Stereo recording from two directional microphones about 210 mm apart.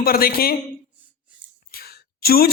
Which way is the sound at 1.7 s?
45° left (ahead or behind).